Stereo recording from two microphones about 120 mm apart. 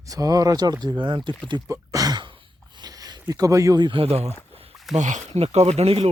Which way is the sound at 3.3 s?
30° right (ahead or behind).